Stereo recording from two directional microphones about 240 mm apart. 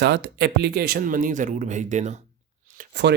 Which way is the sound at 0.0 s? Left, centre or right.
Right.